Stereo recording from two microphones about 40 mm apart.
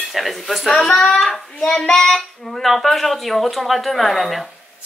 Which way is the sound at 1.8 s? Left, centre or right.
Centre.